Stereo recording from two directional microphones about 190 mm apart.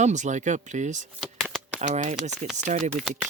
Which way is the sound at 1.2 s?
Centre (ahead or behind).